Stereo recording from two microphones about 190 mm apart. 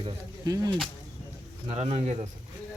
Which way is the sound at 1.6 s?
35° right (ahead or behind).